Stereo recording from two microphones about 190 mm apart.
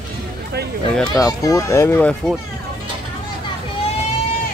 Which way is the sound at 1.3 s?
15° left (ahead or behind).